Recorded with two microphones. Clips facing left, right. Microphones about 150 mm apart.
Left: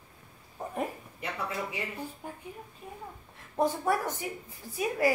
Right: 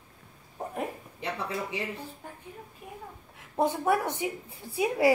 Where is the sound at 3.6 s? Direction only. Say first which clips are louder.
Right 2 dB; 20° right (ahead or behind).